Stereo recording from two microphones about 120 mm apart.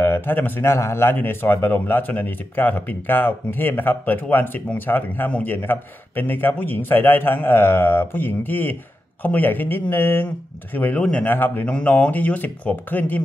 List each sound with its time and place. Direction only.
0.0 s a man's voice: 20° left (ahead or behind)